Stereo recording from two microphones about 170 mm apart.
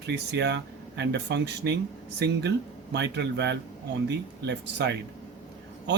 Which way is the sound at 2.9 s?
90° right.